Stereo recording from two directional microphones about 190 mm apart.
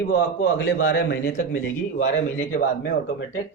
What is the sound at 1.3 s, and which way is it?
A man's voice, 40° left (ahead or behind).